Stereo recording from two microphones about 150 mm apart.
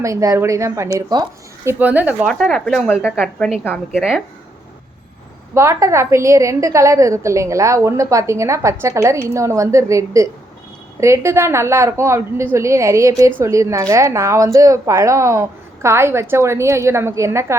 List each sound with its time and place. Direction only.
0.0 s a woman's voice: 20° right (ahead or behind)
1.6 s speech: 10° right (ahead or behind)
2.2 s a woman's voice: 5° left (ahead or behind)
3.9 s speech: 5° right (ahead or behind)
5.5 s a woman's voice: 20° right (ahead or behind)